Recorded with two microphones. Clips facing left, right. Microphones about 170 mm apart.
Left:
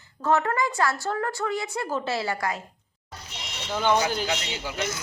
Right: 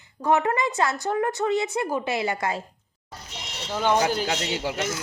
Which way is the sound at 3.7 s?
5° right (ahead or behind).